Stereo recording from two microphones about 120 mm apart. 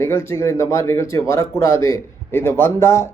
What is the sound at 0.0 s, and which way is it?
Speech, 20° left (ahead or behind).